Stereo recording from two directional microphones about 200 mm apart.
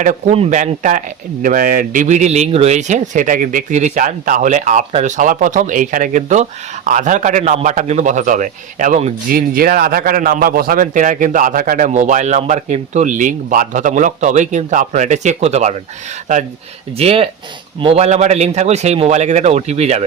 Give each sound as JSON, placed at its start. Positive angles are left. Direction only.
{"t": 0.0, "sound": "speech", "side_deg": -40}
{"t": 9.3, "sound": "speech", "side_deg": -45}
{"t": 17.0, "sound": "speech", "side_deg": -30}